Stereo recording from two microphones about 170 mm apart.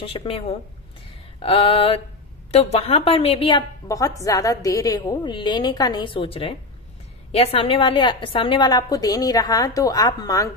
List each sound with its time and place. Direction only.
0.0 s a woman's voice: 35° left (ahead or behind)
3.8 s a woman's voice: 20° left (ahead or behind)